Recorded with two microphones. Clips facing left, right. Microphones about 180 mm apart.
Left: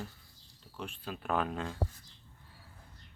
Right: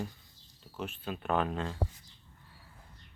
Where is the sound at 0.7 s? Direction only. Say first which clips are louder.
Right 3 dB; 5° right (ahead or behind).